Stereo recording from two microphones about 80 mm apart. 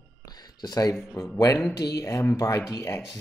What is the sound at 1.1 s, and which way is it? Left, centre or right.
Speech, left.